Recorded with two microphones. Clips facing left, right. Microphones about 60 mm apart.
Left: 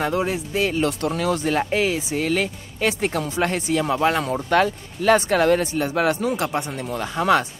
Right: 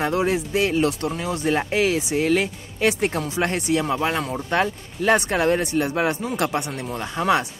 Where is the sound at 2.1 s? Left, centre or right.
Right.